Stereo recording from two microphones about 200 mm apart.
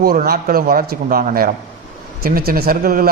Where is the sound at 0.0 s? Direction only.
45° right (ahead or behind).